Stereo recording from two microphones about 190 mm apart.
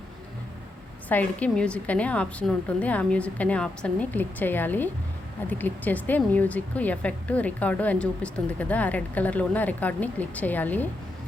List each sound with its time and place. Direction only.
1.0 s a woman's voice: 10° left (ahead or behind)